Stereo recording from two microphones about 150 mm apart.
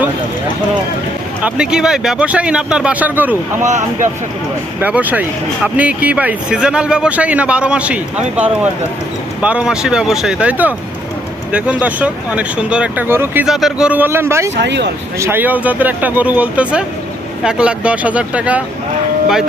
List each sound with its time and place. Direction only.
1.4 s speech: 10° right (ahead or behind)
3.6 s speech: 55° right (ahead or behind)
4.8 s speech: 10° right (ahead or behind)
13.5 s speech: centre (ahead or behind)